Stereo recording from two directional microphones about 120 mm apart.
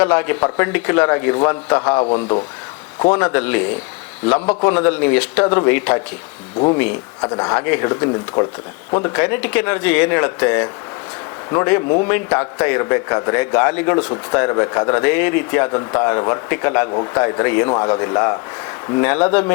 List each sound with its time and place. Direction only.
0.0 s a man's voice: 15° left (ahead or behind)
2.0 s speech: 50° left (ahead or behind)
3.1 s a man's voice: 15° left (ahead or behind)
7.2 s speech: 30° left (ahead or behind)
7.6 s a man's voice: 15° left (ahead or behind)
7.9 s a man's voice: 30° left (ahead or behind)
17.7 s speech: 30° left (ahead or behind)
19.0 s a man's voice: 15° left (ahead or behind)